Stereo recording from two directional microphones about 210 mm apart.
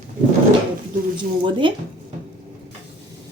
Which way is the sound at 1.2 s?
20° right (ahead or behind).